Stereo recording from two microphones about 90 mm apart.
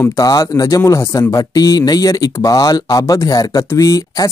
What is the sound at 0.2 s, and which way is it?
Speech, 40° left (ahead or behind).